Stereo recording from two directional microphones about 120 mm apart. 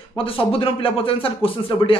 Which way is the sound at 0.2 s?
50° left (ahead or behind).